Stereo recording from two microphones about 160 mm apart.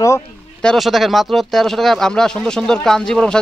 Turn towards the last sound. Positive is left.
turn(degrees=5)  # may be behind; listen again after turning